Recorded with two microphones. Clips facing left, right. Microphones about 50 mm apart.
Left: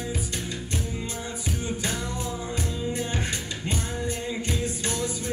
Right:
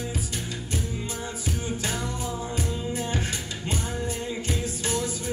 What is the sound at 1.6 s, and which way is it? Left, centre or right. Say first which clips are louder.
Music: even; centre.